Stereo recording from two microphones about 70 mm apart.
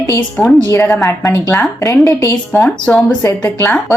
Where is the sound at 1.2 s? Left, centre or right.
Left.